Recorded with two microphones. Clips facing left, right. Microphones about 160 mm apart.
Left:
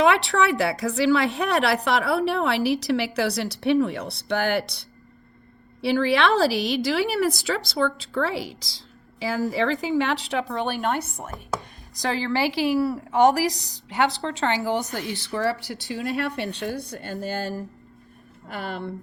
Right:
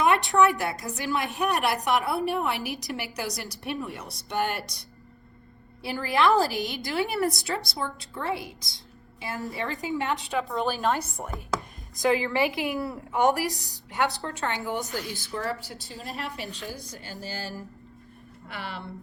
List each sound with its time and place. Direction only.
0.0 s a woman's voice: 90° left; by 11.1 s 65° left (ahead or behind)
11.9 s a woman's voice: 80° left
14.7 s speech: 70° left (ahead or behind)
18.4 s a woman's voice: 45° left (ahead or behind)